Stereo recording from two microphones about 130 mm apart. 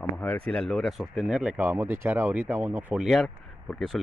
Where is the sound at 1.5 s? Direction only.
20° right (ahead or behind).